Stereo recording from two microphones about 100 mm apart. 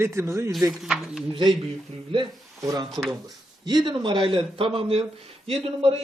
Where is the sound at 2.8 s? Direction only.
Centre (ahead or behind).